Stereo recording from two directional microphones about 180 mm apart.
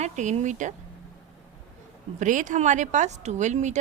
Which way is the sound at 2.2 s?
45° right (ahead or behind).